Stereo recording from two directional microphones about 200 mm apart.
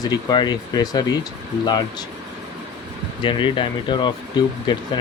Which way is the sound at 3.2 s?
25° left (ahead or behind).